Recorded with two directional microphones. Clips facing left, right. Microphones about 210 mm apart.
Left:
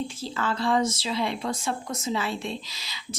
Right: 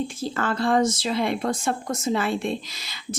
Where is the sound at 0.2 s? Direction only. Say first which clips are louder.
Right 4 dB; 50° right (ahead or behind).